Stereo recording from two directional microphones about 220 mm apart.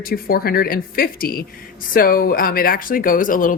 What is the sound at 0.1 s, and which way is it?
Speech, 45° left (ahead or behind).